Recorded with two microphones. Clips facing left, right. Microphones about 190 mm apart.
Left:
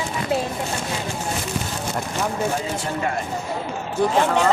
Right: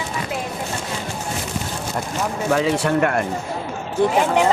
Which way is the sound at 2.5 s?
80° right.